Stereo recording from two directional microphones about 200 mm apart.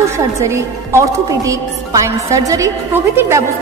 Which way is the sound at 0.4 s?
15° right (ahead or behind).